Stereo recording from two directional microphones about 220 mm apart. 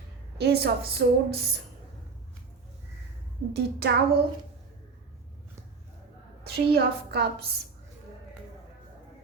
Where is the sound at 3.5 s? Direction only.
50° right (ahead or behind).